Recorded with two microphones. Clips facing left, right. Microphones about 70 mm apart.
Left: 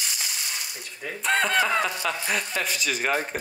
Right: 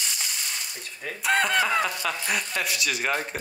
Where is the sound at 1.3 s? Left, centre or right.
Centre.